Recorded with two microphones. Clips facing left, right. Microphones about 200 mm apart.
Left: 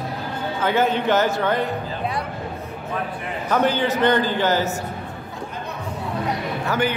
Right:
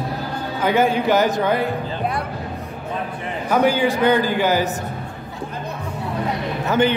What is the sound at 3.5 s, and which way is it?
Speech, 10° right (ahead or behind).